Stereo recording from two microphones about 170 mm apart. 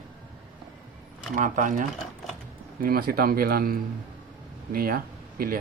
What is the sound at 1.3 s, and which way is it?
Speech, 50° right (ahead or behind).